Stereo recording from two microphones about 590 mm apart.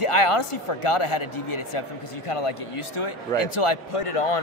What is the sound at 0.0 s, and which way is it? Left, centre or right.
A man's voice, left.